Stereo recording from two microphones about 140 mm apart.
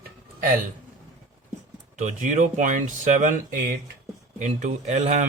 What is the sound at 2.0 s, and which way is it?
Speech, 60° right (ahead or behind).